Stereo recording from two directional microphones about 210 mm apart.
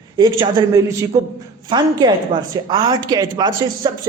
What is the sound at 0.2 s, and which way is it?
A woman's voice, 15° right (ahead or behind).